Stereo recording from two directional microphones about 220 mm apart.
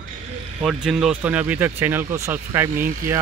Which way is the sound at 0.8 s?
5° right (ahead or behind).